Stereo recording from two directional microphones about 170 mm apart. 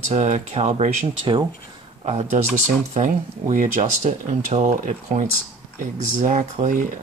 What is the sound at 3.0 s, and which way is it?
Speech, 50° right (ahead or behind).